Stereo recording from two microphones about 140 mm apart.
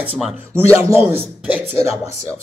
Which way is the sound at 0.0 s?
10° right (ahead or behind).